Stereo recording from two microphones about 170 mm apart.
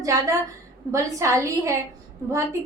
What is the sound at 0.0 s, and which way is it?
A woman's voice, 20° right (ahead or behind).